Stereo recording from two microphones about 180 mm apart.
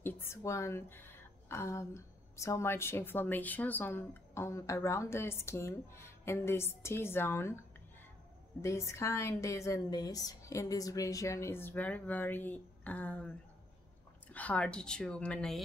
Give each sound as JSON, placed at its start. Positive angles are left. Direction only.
{"t": 0.0, "sound": "a woman's voice", "side_deg": 15}
{"t": 14.3, "sound": "speech", "side_deg": 10}